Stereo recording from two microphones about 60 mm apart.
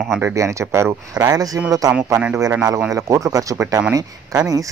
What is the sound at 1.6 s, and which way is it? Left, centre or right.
Speech, right.